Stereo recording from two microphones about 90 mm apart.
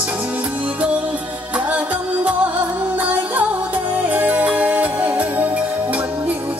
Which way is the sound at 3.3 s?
15° right (ahead or behind).